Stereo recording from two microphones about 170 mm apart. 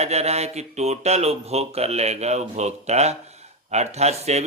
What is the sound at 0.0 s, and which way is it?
Speech, 40° right (ahead or behind).